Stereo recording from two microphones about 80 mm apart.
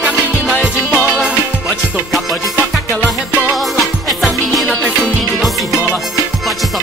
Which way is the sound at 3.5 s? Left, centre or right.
Centre.